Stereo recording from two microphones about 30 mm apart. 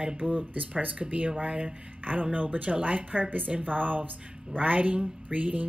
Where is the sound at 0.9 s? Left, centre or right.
Right.